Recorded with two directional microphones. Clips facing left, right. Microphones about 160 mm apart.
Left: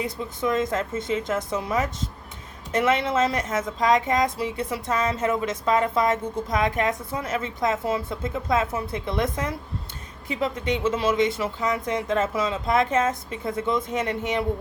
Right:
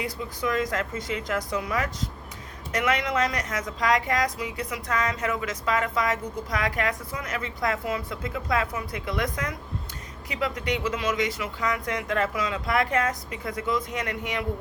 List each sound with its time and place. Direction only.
0.0 s a woman's voice: 25° left (ahead or behind)